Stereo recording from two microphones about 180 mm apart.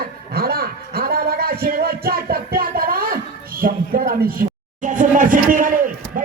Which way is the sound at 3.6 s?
50° right (ahead or behind).